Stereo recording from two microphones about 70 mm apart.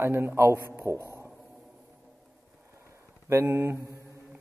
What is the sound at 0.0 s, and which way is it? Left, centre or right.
A man's voice, right.